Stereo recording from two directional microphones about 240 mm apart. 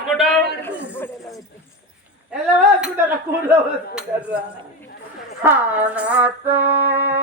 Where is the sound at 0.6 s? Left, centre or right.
Centre.